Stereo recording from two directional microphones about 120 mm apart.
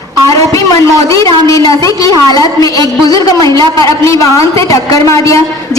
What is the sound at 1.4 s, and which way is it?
A woman's voice, 30° left (ahead or behind).